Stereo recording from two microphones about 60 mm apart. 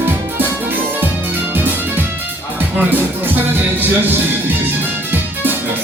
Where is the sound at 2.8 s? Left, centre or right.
Right.